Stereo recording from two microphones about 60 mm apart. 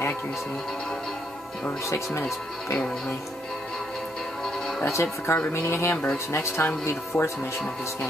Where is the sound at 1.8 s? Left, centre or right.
Left.